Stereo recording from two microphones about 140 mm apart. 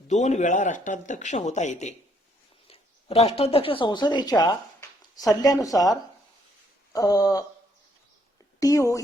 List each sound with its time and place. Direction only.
0.1 s speech: 55° left (ahead or behind)
2.6 s speech: 45° left (ahead or behind); by 7.4 s 25° left (ahead or behind)
8.5 s a woman's voice: 25° left (ahead or behind)